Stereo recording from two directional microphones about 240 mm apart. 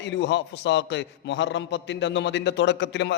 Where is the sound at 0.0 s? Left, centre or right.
Left.